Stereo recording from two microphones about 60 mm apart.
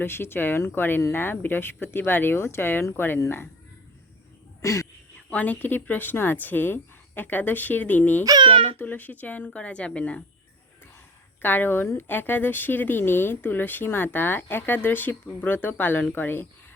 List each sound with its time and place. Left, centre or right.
0.0 s speech: left
4.6 s speech: left
5.3 s a woman's voice: left
11.4 s speech: left